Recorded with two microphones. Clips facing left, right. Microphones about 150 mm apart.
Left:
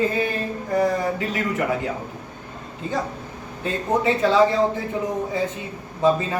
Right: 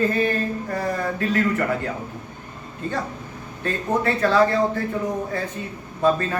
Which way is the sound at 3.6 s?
15° left (ahead or behind).